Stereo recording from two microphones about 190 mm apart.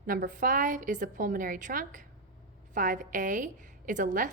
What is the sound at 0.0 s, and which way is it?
A woman's voice, 45° right (ahead or behind).